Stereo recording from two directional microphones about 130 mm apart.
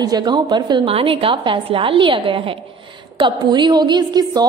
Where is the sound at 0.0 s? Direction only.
30° right (ahead or behind).